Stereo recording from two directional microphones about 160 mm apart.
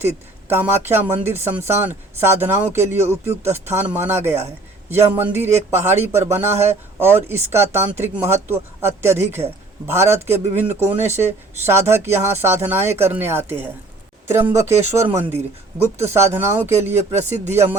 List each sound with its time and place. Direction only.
0.0 s speech: 15° right (ahead or behind)